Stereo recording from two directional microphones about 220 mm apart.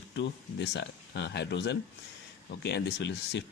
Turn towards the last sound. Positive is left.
turn(degrees=50)  # may be behind; listen again after turning